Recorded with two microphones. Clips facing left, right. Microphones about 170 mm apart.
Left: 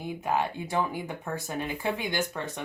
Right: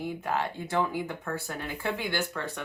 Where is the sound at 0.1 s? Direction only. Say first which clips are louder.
Left 7 dB; 15° left (ahead or behind).